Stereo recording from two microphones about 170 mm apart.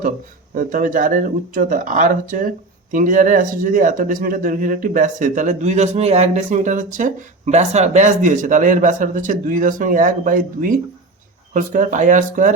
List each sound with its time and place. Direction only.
0.5 s speech: 55° right (ahead or behind)